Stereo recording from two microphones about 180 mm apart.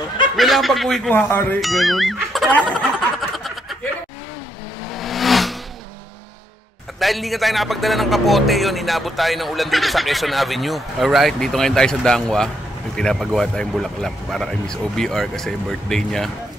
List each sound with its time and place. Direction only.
0.4 s a man's voice: centre (ahead or behind)
1.3 s speech: 10° left (ahead or behind)
1.6 s speech: centre (ahead or behind)
4.9 s a sound: centre (ahead or behind)
7.0 s a man's voice: centre (ahead or behind)